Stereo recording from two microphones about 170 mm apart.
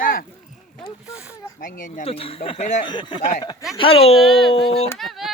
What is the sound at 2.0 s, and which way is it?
Speech, 35° left (ahead or behind).